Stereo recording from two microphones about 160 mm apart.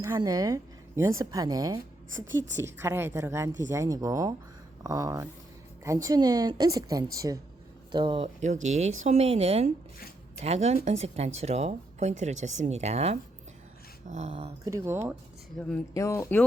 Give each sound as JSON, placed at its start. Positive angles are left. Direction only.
{"t": 0.2, "sound": "a woman's voice", "side_deg": -25}
{"t": 7.9, "sound": "speech", "side_deg": -30}
{"t": 8.4, "sound": "speech", "side_deg": -45}
{"t": 14.6, "sound": "a woman's voice", "side_deg": -20}
{"t": 15.6, "sound": "speech", "side_deg": 5}
{"t": 16.0, "sound": "speech", "side_deg": 20}